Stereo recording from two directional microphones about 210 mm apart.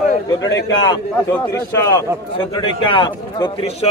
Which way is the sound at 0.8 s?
10° left (ahead or behind).